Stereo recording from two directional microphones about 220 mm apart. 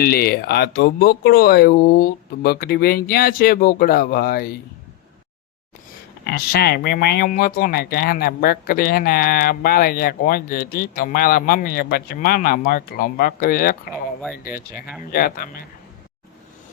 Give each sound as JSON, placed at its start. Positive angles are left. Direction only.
{"t": 0.0, "sound": "speech", "side_deg": 45}
{"t": 6.2, "sound": "speech", "side_deg": 45}
{"t": 13.9, "sound": "speech", "side_deg": 0}
{"t": 14.4, "sound": "speech", "side_deg": 40}